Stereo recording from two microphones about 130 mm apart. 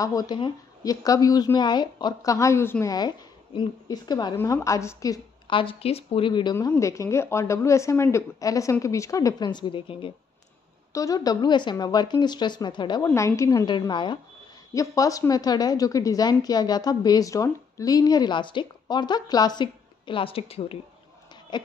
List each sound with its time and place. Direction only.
0.0 s a woman's voice: 30° left (ahead or behind)
2.3 s a woman's voice: 20° left (ahead or behind)
2.9 s a woman's voice: 35° left (ahead or behind)
4.4 s a woman's voice: 20° left (ahead or behind)
5.5 s speech: 40° left (ahead or behind)
6.5 s a woman's voice: 25° left (ahead or behind); by 10.1 s 40° left (ahead or behind)
10.9 s a woman's voice: 25° left (ahead or behind)
13.1 s a woman's voice: 25° left (ahead or behind)
13.7 s a woman's voice: 35° left (ahead or behind)
14.7 s a woman's voice: 25° left (ahead or behind); by 20.7 s 50° left (ahead or behind)